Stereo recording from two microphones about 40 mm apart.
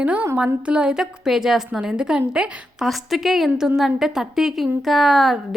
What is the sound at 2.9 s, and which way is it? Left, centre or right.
A woman's voice, centre.